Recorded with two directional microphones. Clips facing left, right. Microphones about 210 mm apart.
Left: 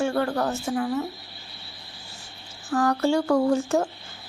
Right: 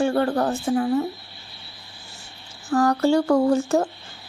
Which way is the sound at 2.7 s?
40° right (ahead or behind).